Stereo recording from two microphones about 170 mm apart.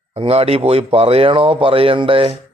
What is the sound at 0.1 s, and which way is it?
A man's voice, 35° right (ahead or behind).